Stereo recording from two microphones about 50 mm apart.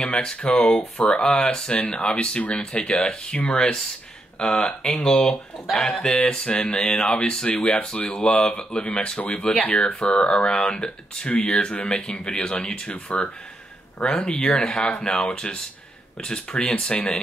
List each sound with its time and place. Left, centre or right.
0.0 s speech: centre
6.1 s speech: centre
9.5 s speech: left; by 16.9 s centre